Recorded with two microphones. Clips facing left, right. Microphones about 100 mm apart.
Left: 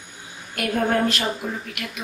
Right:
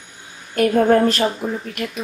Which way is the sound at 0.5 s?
40° right (ahead or behind).